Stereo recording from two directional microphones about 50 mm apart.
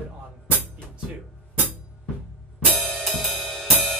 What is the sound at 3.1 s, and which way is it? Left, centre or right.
Music, centre.